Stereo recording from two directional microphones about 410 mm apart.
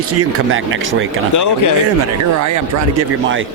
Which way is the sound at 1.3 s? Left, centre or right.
Left.